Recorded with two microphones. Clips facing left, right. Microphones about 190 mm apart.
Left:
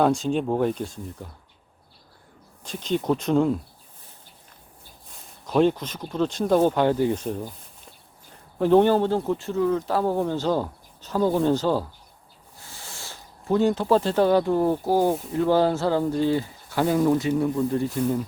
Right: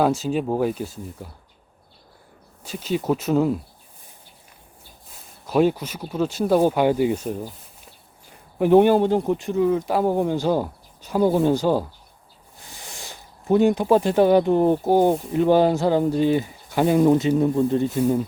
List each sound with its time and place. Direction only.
0.0 s speech: 5° right (ahead or behind)
2.6 s speech: 5° right (ahead or behind)
5.5 s speech: 10° right (ahead or behind)